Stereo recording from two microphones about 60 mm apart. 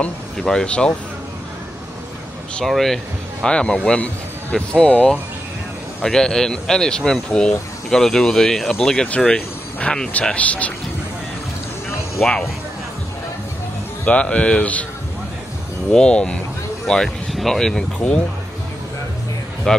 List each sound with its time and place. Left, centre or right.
0.4 s speech: centre
2.6 s speech: centre
3.4 s speech: centre
9.2 s speech: centre
12.2 s speech: centre
14.0 s speech: left
15.9 s speech: centre
19.7 s speech: centre